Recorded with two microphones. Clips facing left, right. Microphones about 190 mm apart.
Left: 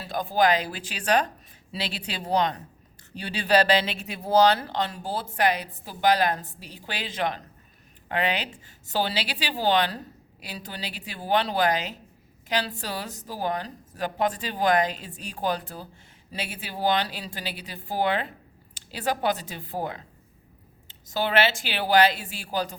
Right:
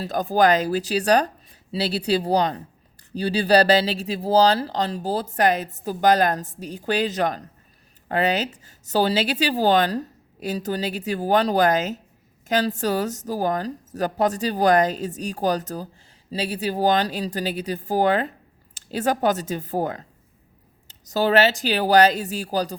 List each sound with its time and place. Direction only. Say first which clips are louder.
0.0 s a woman's voice: right 4 dB; 40° right (ahead or behind)